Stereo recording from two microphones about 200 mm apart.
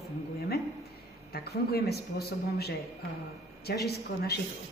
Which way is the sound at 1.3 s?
50° left (ahead or behind).